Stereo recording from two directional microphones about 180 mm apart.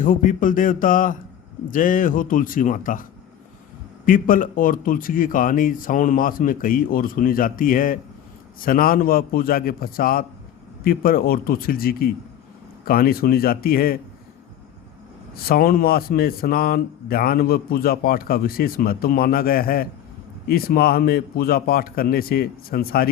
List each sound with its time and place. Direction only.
0.0 s speech: 50° left (ahead or behind)
15.4 s speech: 55° left (ahead or behind)